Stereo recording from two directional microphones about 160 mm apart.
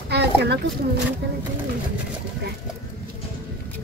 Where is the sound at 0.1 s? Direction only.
90° right.